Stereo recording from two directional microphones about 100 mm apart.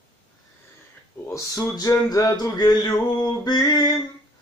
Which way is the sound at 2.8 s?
45° left (ahead or behind).